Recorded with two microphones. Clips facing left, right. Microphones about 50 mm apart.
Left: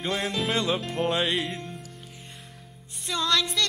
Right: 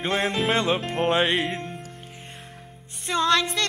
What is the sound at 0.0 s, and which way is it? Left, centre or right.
Music, right.